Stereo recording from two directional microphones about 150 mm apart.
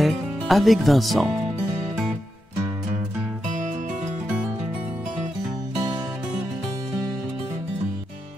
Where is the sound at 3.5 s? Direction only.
55° right (ahead or behind).